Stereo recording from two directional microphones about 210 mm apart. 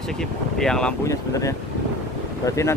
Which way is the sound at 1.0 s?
15° left (ahead or behind).